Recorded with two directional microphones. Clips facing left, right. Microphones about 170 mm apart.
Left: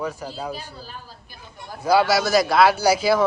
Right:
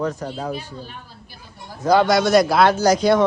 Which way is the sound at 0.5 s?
35° left (ahead or behind).